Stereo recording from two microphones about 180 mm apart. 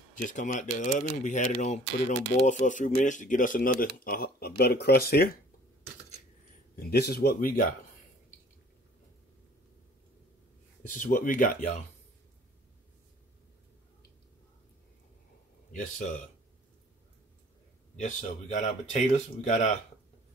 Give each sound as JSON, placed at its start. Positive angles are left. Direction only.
{"t": 0.1, "sound": "speech", "side_deg": 45}
{"t": 6.8, "sound": "speech", "side_deg": 60}
{"t": 10.9, "sound": "speech", "side_deg": 45}
{"t": 15.7, "sound": "speech", "side_deg": 45}
{"t": 17.9, "sound": "speech", "side_deg": 40}